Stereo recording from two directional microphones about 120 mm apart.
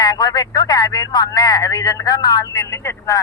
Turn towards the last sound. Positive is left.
turn(degrees=25)  # may be behind; listen again after turning